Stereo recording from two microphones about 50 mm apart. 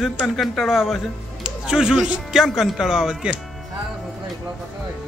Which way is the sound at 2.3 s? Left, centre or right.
Centre.